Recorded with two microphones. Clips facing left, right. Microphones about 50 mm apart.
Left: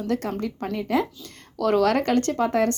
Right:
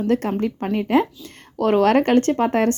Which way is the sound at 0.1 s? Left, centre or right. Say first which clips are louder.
Right 4 dB; right.